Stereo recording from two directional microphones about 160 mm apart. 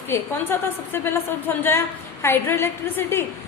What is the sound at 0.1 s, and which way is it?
A woman's voice, 15° left (ahead or behind).